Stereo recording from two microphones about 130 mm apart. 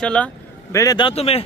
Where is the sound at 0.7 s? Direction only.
25° left (ahead or behind).